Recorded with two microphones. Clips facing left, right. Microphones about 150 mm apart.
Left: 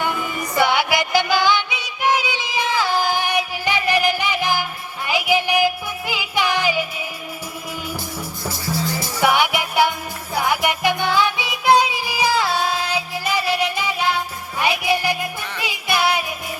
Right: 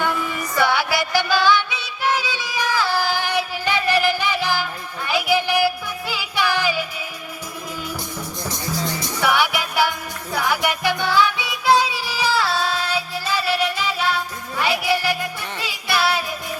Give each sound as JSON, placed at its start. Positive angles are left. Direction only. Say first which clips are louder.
{"t": 0.5, "sound": "music", "louder": "left 2 dB", "side_deg": 15}
{"t": 8.4, "sound": "music", "louder": "left 2 dB", "side_deg": 5}
{"t": 9.2, "sound": "music", "louder": "left 2 dB", "side_deg": 20}